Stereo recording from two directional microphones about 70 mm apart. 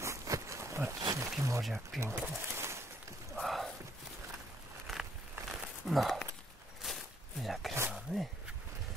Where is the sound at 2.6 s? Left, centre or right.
Right.